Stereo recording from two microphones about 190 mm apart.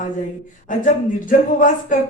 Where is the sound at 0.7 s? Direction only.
45° left (ahead or behind).